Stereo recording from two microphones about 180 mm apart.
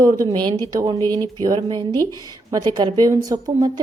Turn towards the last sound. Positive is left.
turn(degrees=-20)  # may be behind; listen again after turning